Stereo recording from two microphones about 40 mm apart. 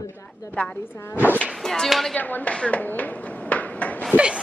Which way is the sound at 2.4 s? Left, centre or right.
Left.